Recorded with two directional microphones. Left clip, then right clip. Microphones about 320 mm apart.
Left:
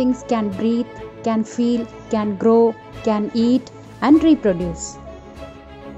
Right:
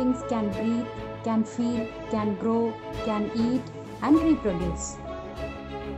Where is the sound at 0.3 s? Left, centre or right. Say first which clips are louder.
Left 7 dB; centre.